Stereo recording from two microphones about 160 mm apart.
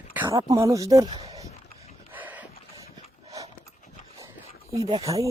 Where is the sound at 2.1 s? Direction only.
10° right (ahead or behind).